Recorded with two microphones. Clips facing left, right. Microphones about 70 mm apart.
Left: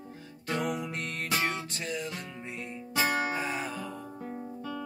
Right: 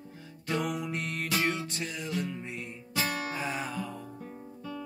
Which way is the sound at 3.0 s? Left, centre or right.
Left.